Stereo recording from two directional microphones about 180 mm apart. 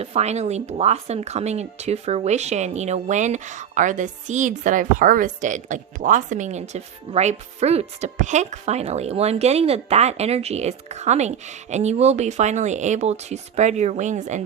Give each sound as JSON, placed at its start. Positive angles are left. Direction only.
{"t": 0.0, "sound": "speech", "side_deg": -35}